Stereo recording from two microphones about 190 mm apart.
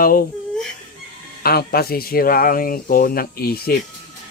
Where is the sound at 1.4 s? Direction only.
55° left (ahead or behind).